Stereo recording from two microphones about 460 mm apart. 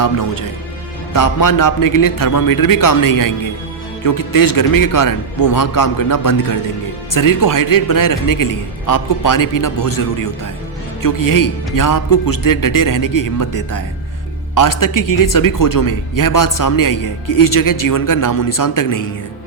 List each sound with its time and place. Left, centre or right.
1.1 s speech: left